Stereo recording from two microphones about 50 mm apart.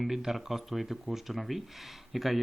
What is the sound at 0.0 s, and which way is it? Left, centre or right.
Speech, centre.